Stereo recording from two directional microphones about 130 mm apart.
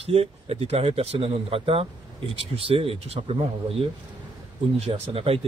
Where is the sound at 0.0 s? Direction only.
50° right (ahead or behind).